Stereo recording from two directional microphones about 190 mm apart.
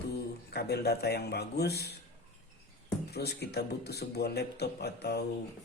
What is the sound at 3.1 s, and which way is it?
A man's voice, 60° left (ahead or behind).